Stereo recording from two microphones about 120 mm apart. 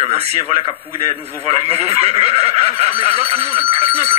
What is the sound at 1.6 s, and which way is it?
A man's voice, 60° right (ahead or behind).